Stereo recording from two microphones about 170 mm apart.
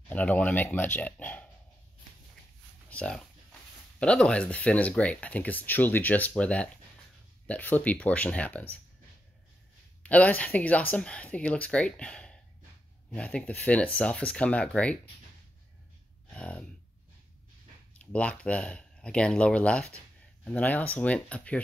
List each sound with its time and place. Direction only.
0.1 s speech: 10° left (ahead or behind)
2.9 s speech: 5° left (ahead or behind)
10.0 s speech: 10° left (ahead or behind)
16.3 s a sound: 5° left (ahead or behind)
18.1 s speech: 5° left (ahead or behind)